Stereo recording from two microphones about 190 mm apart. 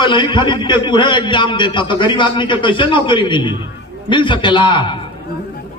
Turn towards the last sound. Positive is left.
turn(degrees=25)  # may be behind; listen again after turning